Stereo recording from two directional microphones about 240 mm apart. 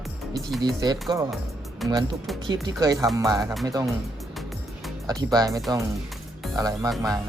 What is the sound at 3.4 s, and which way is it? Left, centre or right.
Speech, centre.